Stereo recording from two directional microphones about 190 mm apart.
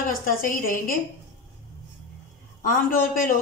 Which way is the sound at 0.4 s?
50° left (ahead or behind).